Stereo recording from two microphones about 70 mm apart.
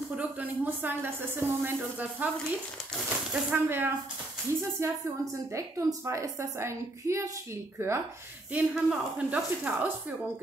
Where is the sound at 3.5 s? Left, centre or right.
Right.